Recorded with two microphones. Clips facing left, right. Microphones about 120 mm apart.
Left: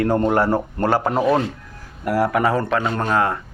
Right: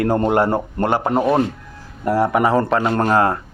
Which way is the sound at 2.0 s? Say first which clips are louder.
Right 2 dB; 25° right (ahead or behind).